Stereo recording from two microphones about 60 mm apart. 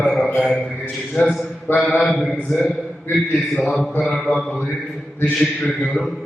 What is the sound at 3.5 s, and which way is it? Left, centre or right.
Speech, centre.